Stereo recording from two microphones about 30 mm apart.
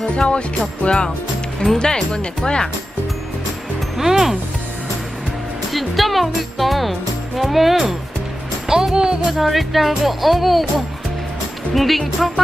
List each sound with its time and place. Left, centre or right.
0.2 s music: left
1.6 s speech: left
2.1 s speech: left
3.9 s speech: centre
5.7 s speech: centre
8.6 s speech: centre
9.4 s speech: centre